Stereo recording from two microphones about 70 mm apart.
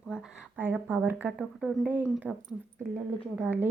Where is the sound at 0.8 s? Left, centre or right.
Right.